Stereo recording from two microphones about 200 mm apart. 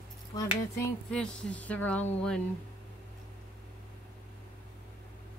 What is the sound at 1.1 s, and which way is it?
A woman's voice, 5° left (ahead or behind).